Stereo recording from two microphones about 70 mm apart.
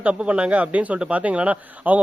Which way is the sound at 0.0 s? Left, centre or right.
Centre.